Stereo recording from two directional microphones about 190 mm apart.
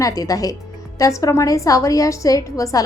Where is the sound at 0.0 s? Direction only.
15° left (ahead or behind).